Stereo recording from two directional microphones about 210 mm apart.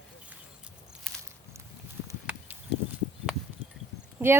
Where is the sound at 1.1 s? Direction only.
5° left (ahead or behind).